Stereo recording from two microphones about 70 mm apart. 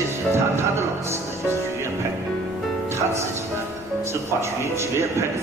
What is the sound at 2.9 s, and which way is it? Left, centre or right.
Speech, right.